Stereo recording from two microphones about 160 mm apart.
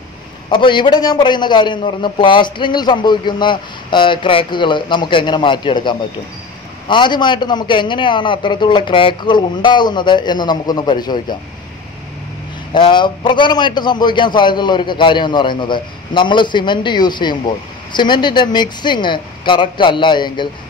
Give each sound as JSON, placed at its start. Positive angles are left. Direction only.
{"t": 0.5, "sound": "a man's voice", "side_deg": 30}
{"t": 12.7, "sound": "a man's voice", "side_deg": 30}